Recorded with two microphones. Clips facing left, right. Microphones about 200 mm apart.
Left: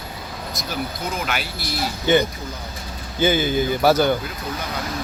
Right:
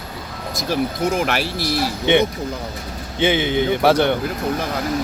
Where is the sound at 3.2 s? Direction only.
75° right (ahead or behind).